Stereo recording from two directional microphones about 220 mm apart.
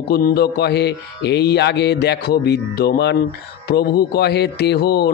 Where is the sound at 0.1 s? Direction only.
45° left (ahead or behind).